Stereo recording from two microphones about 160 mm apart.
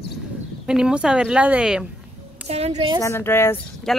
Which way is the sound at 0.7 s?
5° right (ahead or behind).